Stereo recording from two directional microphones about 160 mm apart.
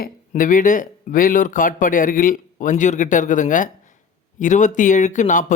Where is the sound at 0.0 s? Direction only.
55° left (ahead or behind).